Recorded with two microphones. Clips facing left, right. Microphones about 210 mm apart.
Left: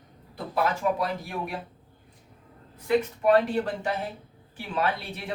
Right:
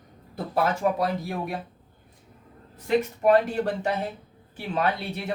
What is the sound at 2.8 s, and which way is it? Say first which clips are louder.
Speech: right 1 dB; 45° right (ahead or behind).